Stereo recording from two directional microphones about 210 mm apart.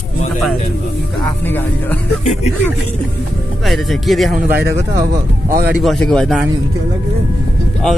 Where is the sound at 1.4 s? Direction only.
10° left (ahead or behind).